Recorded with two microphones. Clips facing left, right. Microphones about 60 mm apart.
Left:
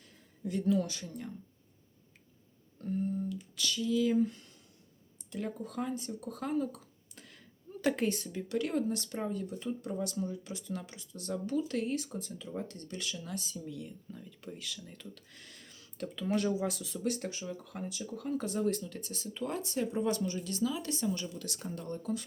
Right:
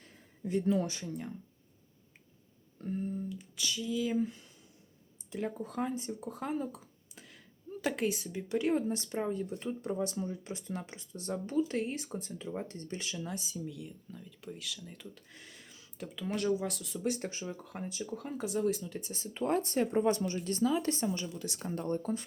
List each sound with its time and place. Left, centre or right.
0.0 s a sound: right
1.0 s speech: centre
2.8 s speech: right
5.3 s speech: right
8.4 s speech: right
13.7 s speech: centre
14.9 s speech: centre
17.0 s speech: right
18.3 s speech: centre
18.8 s speech: centre
19.3 s speech: right
20.1 s speech: right